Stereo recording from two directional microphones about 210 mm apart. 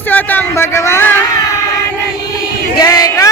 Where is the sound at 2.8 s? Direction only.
15° left (ahead or behind).